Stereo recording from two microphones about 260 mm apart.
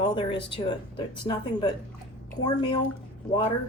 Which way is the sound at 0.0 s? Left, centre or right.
Centre.